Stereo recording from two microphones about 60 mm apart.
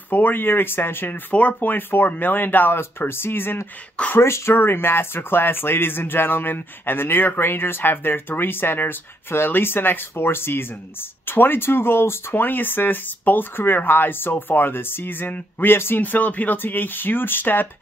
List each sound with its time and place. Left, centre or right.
0.1 s speech: left